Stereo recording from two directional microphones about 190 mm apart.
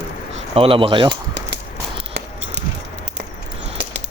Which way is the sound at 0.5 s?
30° right (ahead or behind).